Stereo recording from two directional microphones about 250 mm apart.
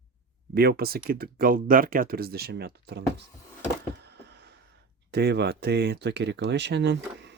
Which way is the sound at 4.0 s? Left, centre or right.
Right.